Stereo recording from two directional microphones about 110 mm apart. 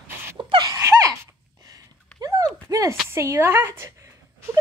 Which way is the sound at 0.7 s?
25° right (ahead or behind).